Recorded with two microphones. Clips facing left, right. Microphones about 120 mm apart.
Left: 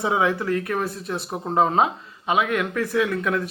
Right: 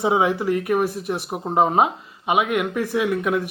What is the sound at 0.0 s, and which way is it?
Speech, 20° right (ahead or behind).